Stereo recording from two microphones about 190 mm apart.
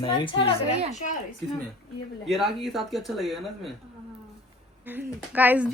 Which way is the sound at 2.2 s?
Centre (ahead or behind).